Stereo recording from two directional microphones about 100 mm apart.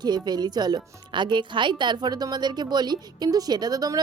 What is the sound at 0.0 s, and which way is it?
Speech, 45° right (ahead or behind).